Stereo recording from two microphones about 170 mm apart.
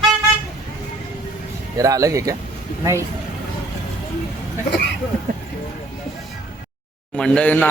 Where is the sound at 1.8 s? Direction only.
20° right (ahead or behind).